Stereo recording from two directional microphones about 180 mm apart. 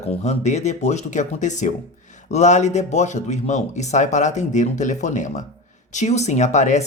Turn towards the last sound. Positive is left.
turn(degrees=40)  # may be behind; listen again after turning